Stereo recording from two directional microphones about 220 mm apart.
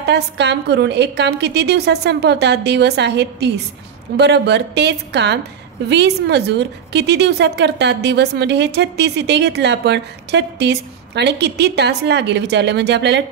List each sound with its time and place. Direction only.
0.0 s a woman's voice: 50° right (ahead or behind)